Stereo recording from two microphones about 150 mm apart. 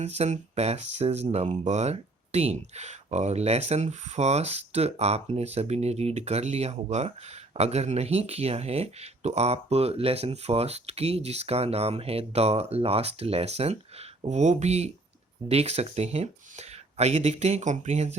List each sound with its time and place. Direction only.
0.0 s speech: 45° right (ahead or behind)